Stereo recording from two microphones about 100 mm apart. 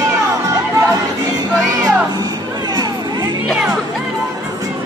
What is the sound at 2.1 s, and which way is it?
Music, 45° right (ahead or behind).